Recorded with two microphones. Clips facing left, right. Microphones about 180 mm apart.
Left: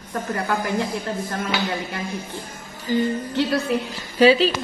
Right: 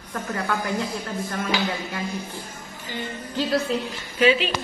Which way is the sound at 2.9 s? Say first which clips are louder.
Left 11 dB; 40° left (ahead or behind).